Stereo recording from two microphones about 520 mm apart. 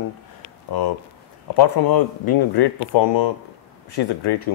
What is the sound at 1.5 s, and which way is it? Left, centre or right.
Speech, left.